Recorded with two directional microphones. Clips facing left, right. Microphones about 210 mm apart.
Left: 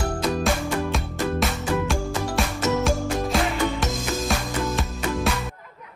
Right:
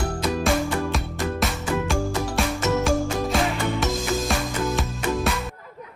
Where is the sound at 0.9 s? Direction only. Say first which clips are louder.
Left 1 dB; centre (ahead or behind).